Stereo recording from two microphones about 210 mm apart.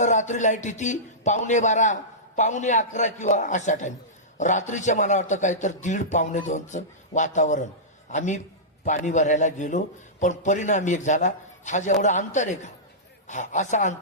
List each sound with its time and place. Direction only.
0.0 s a man's voice: 35° left (ahead or behind)